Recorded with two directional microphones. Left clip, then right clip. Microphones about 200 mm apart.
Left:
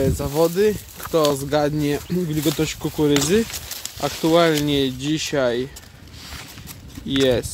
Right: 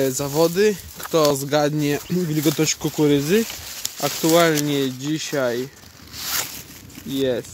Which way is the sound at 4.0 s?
10° right (ahead or behind).